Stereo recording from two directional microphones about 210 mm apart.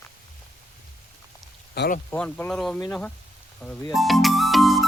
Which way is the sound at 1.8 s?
45° left (ahead or behind).